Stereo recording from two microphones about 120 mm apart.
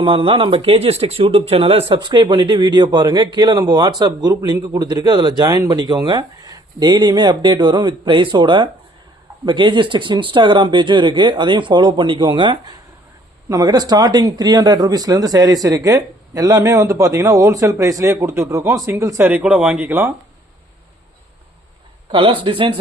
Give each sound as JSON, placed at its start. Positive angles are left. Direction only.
{"t": 0.0, "sound": "speech", "side_deg": -45}
{"t": 13.5, "sound": "speech", "side_deg": -30}
{"t": 22.1, "sound": "speech", "side_deg": -45}